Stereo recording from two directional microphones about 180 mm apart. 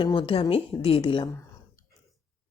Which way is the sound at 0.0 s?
30° left (ahead or behind).